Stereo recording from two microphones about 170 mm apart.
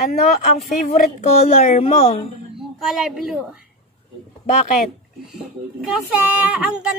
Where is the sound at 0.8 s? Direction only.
55° left (ahead or behind).